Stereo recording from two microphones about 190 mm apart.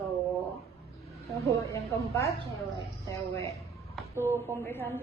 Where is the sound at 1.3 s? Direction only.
15° right (ahead or behind).